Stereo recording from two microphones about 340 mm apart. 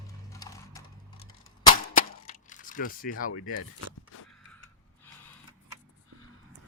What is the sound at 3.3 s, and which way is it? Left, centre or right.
Speech, left.